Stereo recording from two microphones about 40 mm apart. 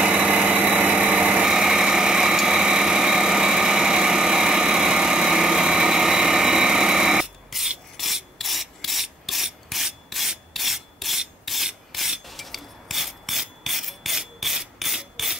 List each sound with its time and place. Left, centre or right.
0.0 s vehicle: right
1.5 s engine: centre
7.5 s filing: centre
8.0 s rub: centre